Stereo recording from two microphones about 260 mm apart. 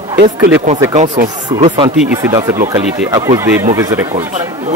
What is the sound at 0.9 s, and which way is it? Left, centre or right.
Speech, right.